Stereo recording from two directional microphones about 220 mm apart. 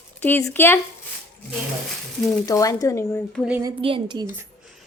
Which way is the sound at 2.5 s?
15° left (ahead or behind).